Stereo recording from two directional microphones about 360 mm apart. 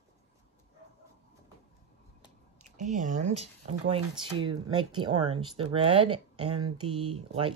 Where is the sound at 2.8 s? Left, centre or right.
Right.